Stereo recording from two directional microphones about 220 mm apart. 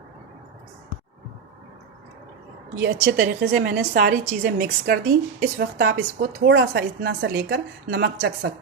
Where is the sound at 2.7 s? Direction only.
50° right (ahead or behind).